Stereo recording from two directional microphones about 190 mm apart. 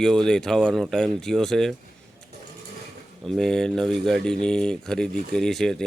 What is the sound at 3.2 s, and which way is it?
Speech, centre (ahead or behind).